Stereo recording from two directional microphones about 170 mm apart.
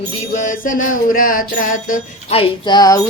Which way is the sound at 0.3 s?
50° left (ahead or behind).